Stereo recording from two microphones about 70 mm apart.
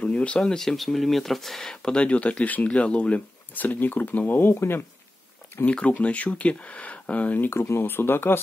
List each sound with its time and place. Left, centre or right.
0.0 s speech: centre; by 4.8 s left
5.7 s speech: centre; by 8.4 s left